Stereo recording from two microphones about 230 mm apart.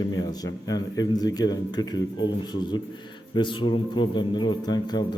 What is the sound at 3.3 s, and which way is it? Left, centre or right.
A man's voice, left.